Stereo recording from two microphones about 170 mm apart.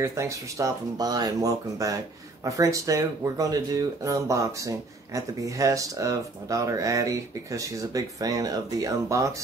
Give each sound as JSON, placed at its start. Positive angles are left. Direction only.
{"t": 0.0, "sound": "speech", "side_deg": -15}